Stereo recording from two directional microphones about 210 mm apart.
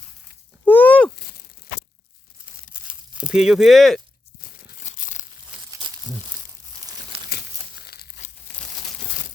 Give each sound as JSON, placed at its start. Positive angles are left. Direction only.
{"t": 0.6, "sound": "a sound", "side_deg": 10}
{"t": 1.1, "sound": "a sound", "side_deg": 45}
{"t": 2.8, "sound": "crumpling", "side_deg": -5}
{"t": 4.4, "sound": "crumpling", "side_deg": 40}
{"t": 5.7, "sound": "crumpling", "side_deg": -15}
{"t": 7.3, "sound": "crumpling", "side_deg": 50}